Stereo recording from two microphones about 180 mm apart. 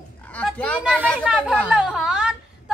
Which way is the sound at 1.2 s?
5° right (ahead or behind).